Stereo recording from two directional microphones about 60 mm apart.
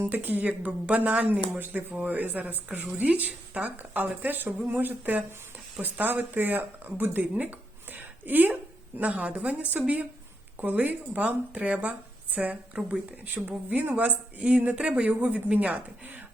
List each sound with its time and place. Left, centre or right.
0.1 s speech: right
7.9 s a sound: right
9.0 s speech: right